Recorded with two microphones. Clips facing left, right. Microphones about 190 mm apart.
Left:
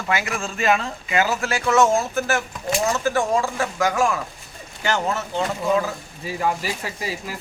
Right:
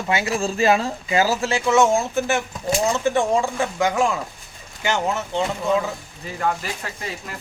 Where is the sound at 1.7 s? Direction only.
15° right (ahead or behind).